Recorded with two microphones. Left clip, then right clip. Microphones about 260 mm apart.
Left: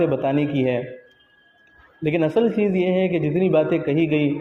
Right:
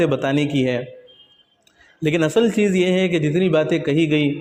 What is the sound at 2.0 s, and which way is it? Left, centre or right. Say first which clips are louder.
A man's voice: right 2 dB; right.